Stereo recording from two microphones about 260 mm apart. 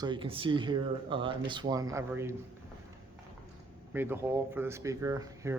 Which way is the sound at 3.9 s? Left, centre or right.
Centre.